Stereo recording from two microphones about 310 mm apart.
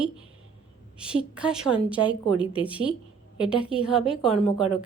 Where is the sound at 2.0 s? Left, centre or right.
Centre.